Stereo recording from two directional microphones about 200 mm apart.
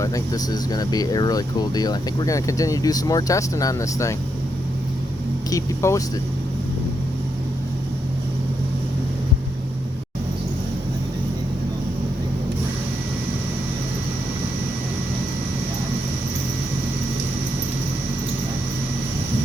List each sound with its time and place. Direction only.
0.0 s speech: 15° left (ahead or behind)
5.5 s speech: 15° left (ahead or behind)